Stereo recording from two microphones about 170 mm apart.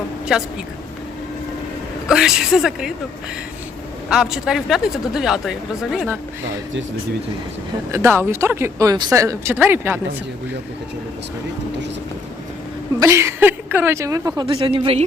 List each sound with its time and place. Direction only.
0.3 s speech: 5° right (ahead or behind)
2.0 s speech: 5° right (ahead or behind)
4.1 s speech: centre (ahead or behind)
7.9 s speech: 15° right (ahead or behind)
13.0 s speech: 15° right (ahead or behind)
14.4 s speech: 30° right (ahead or behind)